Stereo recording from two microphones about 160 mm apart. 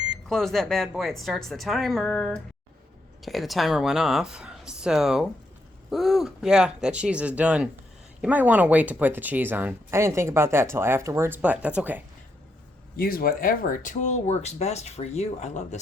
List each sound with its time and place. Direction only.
0.3 s a woman's voice: centre (ahead or behind)
13.0 s speech: 65° left (ahead or behind); by 15.8 s 45° left (ahead or behind)